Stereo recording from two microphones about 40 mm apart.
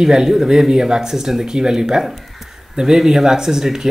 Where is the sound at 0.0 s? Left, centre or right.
Centre.